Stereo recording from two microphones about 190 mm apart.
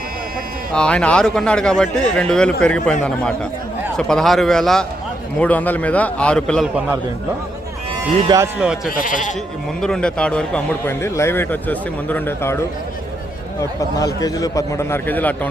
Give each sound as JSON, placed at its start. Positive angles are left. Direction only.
{"t": 0.7, "sound": "a man's voice", "side_deg": 5}
{"t": 6.7, "sound": "a man's voice", "side_deg": -10}
{"t": 8.5, "sound": "a man's voice", "side_deg": -5}
{"t": 9.0, "sound": "speech", "side_deg": 45}
{"t": 9.8, "sound": "a man's voice", "side_deg": 5}
{"t": 13.6, "sound": "a man's voice", "side_deg": 20}